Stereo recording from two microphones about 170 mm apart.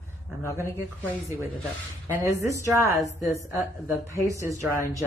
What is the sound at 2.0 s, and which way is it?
A woman's voice, 15° right (ahead or behind).